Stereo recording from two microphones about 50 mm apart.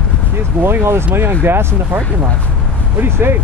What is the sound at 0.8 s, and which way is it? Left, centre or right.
Speech, right.